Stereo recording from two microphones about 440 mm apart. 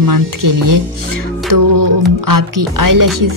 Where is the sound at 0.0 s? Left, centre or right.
Right.